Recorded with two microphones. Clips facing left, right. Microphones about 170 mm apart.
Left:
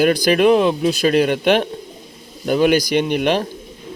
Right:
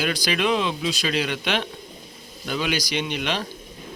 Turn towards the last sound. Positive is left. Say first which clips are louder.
# left 10 dB
turn(degrees=50)  # may be behind; listen again after turning